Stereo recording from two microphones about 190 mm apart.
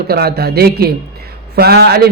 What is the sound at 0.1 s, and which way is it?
Speech, 55° right (ahead or behind).